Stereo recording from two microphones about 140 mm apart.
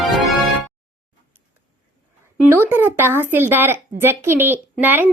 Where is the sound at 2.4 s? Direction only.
15° right (ahead or behind).